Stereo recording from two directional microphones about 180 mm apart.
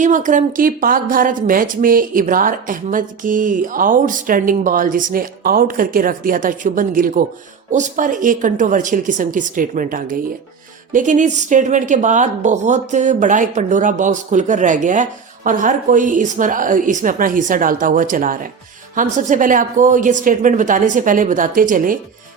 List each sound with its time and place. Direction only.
0.0 s a woman's voice: 45° right (ahead or behind)